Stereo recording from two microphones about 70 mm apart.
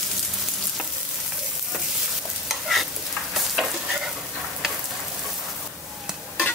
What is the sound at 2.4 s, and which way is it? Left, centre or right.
Stir, centre.